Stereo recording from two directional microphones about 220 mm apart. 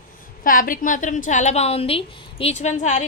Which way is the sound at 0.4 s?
40° left (ahead or behind).